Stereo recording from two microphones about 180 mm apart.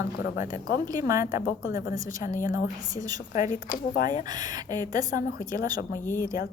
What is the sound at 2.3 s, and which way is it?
Speech, 50° left (ahead or behind).